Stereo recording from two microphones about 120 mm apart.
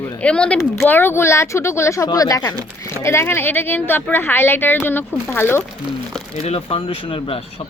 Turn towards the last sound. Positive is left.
turn(degrees=50)  # may be behind; listen again after turning